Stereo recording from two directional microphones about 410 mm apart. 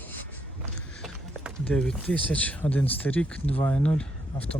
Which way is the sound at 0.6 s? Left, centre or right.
Centre.